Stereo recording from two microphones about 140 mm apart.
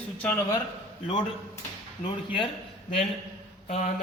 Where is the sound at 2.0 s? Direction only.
40° left (ahead or behind).